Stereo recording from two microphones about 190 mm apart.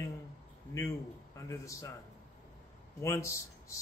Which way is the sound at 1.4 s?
15° left (ahead or behind).